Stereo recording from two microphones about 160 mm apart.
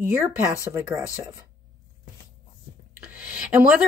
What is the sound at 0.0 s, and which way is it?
Speech, 15° right (ahead or behind).